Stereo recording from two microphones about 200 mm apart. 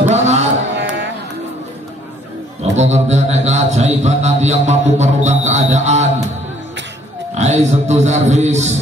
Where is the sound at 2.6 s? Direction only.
35° right (ahead or behind).